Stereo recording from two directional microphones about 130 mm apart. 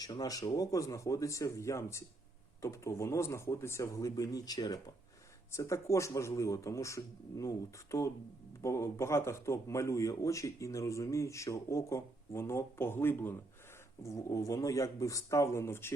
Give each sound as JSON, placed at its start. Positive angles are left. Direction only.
{"t": 0.0, "sound": "speech", "side_deg": 30}